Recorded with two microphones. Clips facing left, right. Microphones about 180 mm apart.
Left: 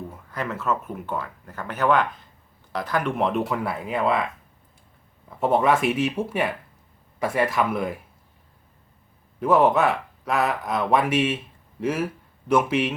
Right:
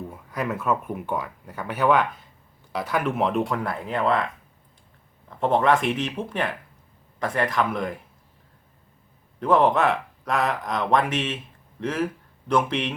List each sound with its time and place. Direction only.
0.1 s speech: 15° right (ahead or behind); by 4.3 s 10° left (ahead or behind)
5.3 s speech: 5° left (ahead or behind)
9.4 s speech: 5° left (ahead or behind)